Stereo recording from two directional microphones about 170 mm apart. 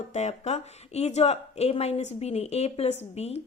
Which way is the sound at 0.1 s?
40° left (ahead or behind).